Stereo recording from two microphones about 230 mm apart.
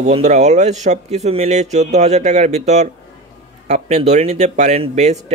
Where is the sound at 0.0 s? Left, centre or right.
Right.